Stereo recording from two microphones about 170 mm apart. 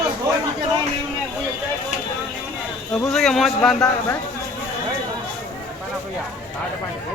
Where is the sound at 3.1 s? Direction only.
Centre (ahead or behind).